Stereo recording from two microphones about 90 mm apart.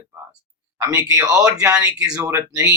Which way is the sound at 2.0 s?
40° right (ahead or behind).